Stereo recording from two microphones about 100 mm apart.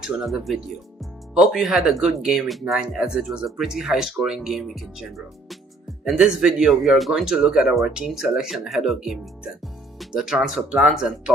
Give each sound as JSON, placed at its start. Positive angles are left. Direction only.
{"t": 0.0, "sound": "speech", "side_deg": -5}